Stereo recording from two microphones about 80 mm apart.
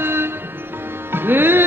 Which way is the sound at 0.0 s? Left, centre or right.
Right.